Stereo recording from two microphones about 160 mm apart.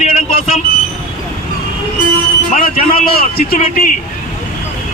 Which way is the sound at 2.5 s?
60° left (ahead or behind).